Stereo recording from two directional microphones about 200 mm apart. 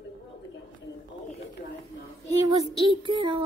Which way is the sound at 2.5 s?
25° right (ahead or behind).